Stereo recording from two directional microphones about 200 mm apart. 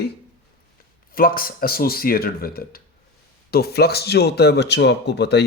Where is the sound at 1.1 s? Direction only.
45° left (ahead or behind).